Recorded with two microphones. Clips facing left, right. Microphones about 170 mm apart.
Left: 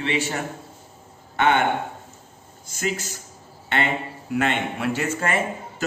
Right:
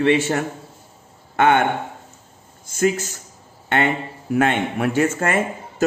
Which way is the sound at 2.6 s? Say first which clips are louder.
Right 8 dB; 50° right (ahead or behind).